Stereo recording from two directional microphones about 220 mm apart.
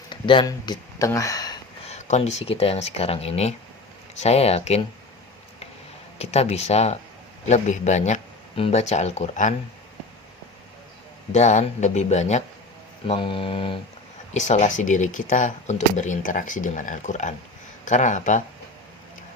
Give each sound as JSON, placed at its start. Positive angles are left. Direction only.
{"t": 0.1, "sound": "speech", "side_deg": 20}
{"t": 1.9, "sound": "speech", "side_deg": 30}
{"t": 6.1, "sound": "speech", "side_deg": 30}
{"t": 11.3, "sound": "speech", "side_deg": 35}